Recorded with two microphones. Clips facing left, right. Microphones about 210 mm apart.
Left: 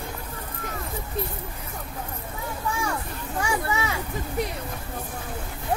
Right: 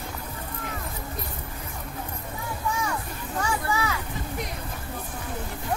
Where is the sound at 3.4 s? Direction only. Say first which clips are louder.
Left 1 dB; 20° left (ahead or behind).